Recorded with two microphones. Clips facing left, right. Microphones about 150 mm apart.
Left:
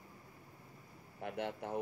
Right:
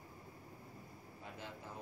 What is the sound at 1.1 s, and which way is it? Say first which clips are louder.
Speech: left 11 dB; 65° left (ahead or behind).